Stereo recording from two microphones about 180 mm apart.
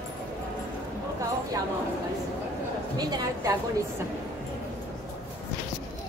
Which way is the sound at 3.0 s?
20° right (ahead or behind).